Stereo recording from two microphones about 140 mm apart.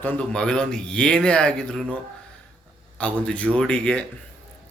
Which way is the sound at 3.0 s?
10° left (ahead or behind).